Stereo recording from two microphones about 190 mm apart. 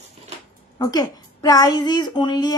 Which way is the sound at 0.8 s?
20° left (ahead or behind).